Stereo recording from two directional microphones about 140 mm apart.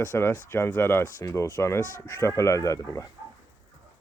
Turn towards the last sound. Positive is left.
turn(degrees=20)  # may be behind; listen again after turning